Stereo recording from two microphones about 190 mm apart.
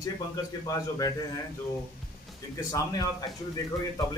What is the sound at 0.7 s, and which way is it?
Speech, 20° left (ahead or behind).